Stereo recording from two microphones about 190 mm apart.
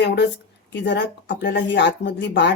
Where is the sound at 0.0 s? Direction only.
60° left (ahead or behind).